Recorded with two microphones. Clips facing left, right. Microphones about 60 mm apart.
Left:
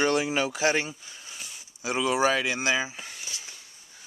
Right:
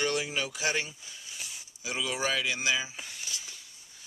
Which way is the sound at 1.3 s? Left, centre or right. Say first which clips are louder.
Right 1 dB; centre.